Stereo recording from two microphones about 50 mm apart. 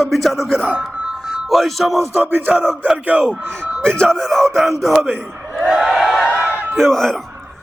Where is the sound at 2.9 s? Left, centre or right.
Right.